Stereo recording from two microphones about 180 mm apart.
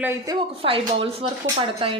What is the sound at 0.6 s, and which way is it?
Speech, 30° right (ahead or behind).